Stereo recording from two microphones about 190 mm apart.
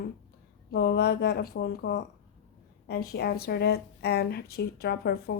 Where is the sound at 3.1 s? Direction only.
55° left (ahead or behind).